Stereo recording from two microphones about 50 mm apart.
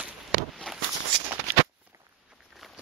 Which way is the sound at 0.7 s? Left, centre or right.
Centre.